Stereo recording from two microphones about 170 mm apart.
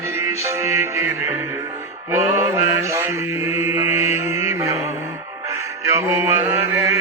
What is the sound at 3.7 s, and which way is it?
Mantra, 15° right (ahead or behind).